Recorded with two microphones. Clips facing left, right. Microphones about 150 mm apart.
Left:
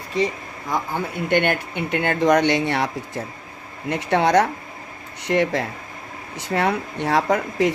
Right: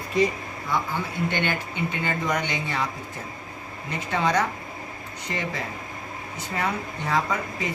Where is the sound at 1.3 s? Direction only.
60° left (ahead or behind).